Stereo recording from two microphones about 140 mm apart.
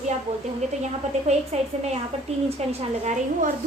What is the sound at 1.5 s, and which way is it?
A woman's voice, 55° right (ahead or behind).